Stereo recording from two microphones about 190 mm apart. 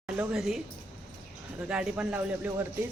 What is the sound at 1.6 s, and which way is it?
A man's voice, 5° right (ahead or behind).